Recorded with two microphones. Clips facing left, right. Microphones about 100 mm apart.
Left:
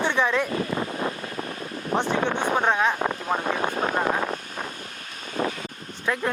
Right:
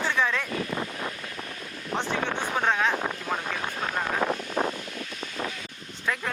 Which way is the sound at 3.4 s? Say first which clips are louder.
Left 6 dB; 50° left (ahead or behind).